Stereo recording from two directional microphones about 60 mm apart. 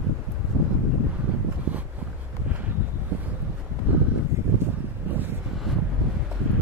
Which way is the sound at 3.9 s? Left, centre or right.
Right.